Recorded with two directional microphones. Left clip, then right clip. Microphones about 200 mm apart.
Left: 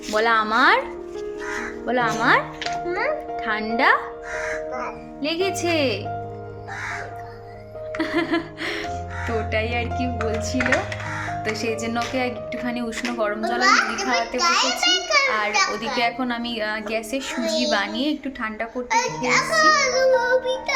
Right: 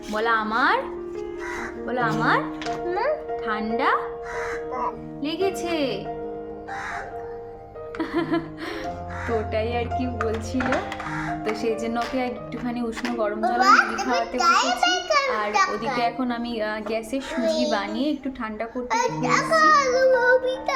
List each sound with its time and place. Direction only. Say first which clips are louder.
0.1 s speech: left 4 dB; 25° left (ahead or behind)
1.9 s speech: left 3 dB; 25° left (ahead or behind)
3.4 s speech: left 5 dB; 25° left (ahead or behind)
5.2 s speech: left 3 dB; 30° left (ahead or behind)
7.9 s music: left 2 dB; centre (ahead or behind)
9.5 s a woman's voice: left 1 dB; centre (ahead or behind)
11.6 s a woman's voice: even; centre (ahead or behind)
13.6 s a child's voice: right 1 dB; 40° right (ahead or behind)
14.0 s a woman's voice: left 1 dB; centre (ahead or behind)
14.3 s a child's voice: right 3 dB; 40° right (ahead or behind)
16.0 s a woman's voice: left 4 dB; centre (ahead or behind)
17.4 s a child's voice: right 1 dB; 45° right (ahead or behind)
17.7 s a woman's voice: left 2 dB; centre (ahead or behind)
18.9 s a child's voice: left 1 dB; 45° right (ahead or behind)